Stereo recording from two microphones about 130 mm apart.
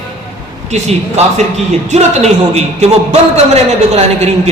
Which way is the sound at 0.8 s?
60° right (ahead or behind).